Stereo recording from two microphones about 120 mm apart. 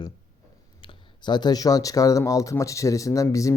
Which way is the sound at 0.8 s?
40° left (ahead or behind).